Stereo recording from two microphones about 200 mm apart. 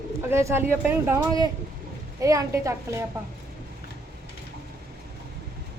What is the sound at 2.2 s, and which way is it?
Speech, 15° right (ahead or behind).